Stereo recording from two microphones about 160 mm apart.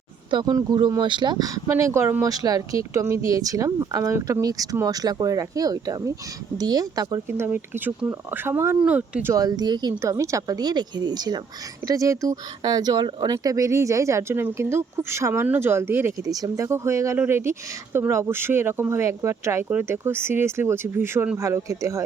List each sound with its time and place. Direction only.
0.3 s speech: 25° right (ahead or behind)
7.3 s speech: 15° right (ahead or behind)
9.3 s speech: 25° right (ahead or behind)